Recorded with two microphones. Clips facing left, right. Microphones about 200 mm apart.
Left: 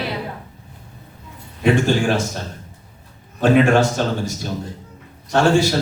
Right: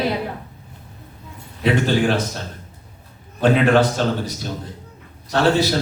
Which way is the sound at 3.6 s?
45° left (ahead or behind).